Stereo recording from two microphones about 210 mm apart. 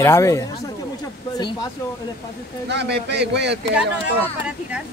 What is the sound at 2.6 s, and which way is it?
Speech, 55° right (ahead or behind).